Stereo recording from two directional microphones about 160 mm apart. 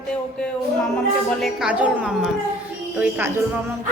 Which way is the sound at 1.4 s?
5° right (ahead or behind).